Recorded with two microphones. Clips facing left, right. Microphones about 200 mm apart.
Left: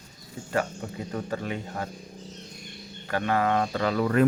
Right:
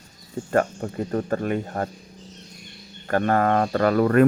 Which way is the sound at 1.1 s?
50° right (ahead or behind).